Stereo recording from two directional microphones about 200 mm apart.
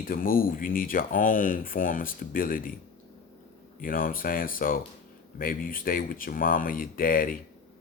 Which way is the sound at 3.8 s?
45° left (ahead or behind).